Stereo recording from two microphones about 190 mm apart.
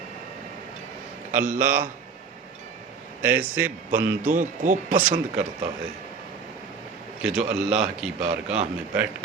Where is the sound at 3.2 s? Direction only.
10° right (ahead or behind).